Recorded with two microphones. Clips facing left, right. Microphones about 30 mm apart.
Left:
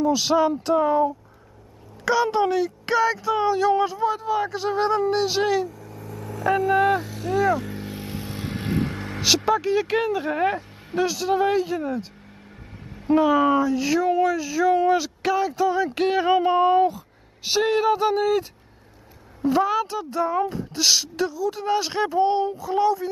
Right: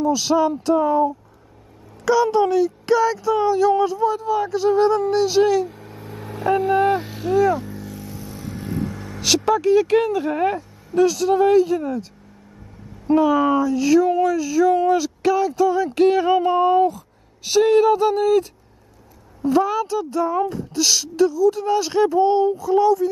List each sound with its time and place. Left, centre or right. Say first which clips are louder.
0.0 s speech: right 1 dB; centre
5.7 s vehicle: right 1 dB; right
6.7 s speech: right 1 dB; centre
7.0 s speech: right 2 dB; right
7.3 s speech: right 3 dB; centre
7.7 s vehicle: left 1 dB; left
9.2 s speech: right 2 dB; centre
13.1 s speech: right 2 dB; centre